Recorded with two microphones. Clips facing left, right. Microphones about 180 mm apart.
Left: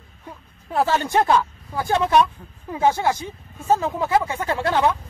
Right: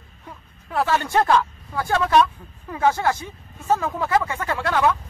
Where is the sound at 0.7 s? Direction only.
30° left (ahead or behind).